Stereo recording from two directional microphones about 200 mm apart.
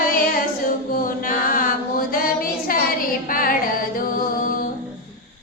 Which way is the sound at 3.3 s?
45° left (ahead or behind).